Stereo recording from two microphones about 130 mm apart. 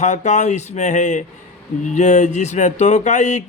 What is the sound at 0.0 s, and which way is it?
Speech, 65° left (ahead or behind).